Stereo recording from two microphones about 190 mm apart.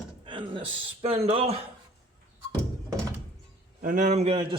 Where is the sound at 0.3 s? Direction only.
25° right (ahead or behind).